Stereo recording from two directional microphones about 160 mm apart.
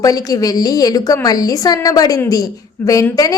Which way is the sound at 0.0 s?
25° left (ahead or behind).